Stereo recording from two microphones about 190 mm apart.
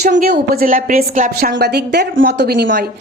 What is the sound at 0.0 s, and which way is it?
A woman's voice, 40° right (ahead or behind).